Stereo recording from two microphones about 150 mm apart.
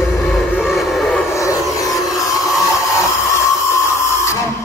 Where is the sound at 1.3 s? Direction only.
20° left (ahead or behind).